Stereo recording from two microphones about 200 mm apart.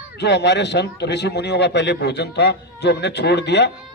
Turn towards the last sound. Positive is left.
turn(degrees=60)  # may be behind; listen again after turning